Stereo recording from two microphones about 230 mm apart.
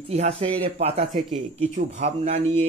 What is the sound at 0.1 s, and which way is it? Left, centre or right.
Speech, right.